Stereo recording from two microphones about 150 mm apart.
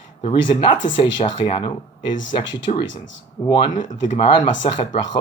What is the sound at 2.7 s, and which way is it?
Speech, 45° left (ahead or behind).